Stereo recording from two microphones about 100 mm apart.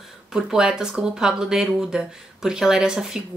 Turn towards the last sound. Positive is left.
turn(degrees=-5)  # may be behind; listen again after turning